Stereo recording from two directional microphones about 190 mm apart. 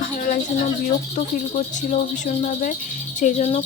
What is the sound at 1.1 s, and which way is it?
Speech, 40° left (ahead or behind).